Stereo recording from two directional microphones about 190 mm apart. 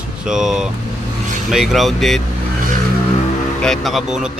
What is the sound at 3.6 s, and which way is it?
Speech, centre (ahead or behind).